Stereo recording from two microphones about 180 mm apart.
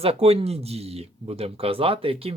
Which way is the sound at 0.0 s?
35° right (ahead or behind).